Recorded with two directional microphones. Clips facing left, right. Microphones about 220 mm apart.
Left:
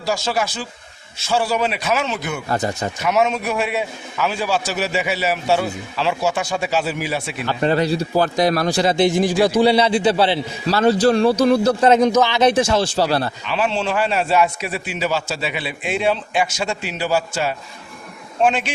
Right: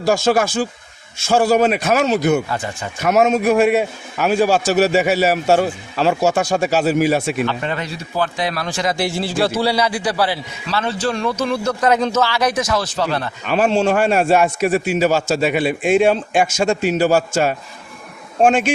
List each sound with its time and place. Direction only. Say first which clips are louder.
0.0 s a man's voice: right 6 dB; 50° right (ahead or behind)
2.5 s a man's voice: left 4 dB; 40° left (ahead or behind)
3.0 s a man's voice: right 5 dB; 45° right (ahead or behind)
7.4 s a man's voice: left 4 dB; 35° left (ahead or behind)
9.0 s a man's voice: left 4 dB; 20° left (ahead or behind)
10.7 s a man's voice: left 6 dB; 40° left (ahead or behind)
13.4 s a man's voice: right 5 dB; 50° right (ahead or behind)